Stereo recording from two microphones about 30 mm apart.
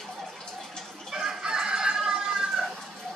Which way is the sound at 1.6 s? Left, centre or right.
Right.